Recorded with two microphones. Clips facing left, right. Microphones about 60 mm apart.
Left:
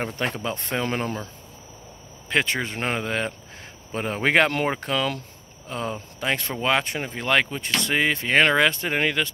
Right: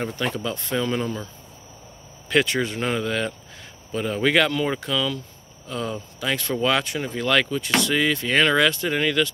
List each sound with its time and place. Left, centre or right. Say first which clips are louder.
0.0 s speech: right 1 dB; left
2.2 s speech: right 3 dB; left
4.5 s speech: even; left
5.7 s speech: right 1 dB; left